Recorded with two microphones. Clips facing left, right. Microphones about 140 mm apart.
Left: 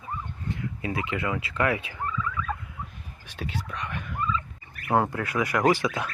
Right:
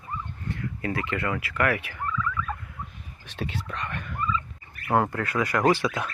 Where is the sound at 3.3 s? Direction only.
5° left (ahead or behind).